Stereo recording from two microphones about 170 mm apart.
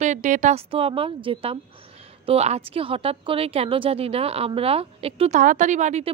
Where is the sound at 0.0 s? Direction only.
45° right (ahead or behind).